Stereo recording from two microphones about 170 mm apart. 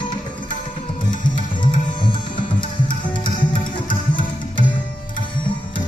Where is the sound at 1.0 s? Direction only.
25° left (ahead or behind).